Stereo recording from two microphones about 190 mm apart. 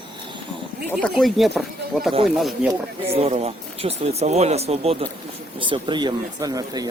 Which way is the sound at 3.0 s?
30° right (ahead or behind).